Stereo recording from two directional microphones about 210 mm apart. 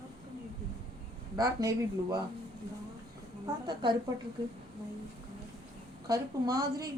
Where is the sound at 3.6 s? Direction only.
20° right (ahead or behind).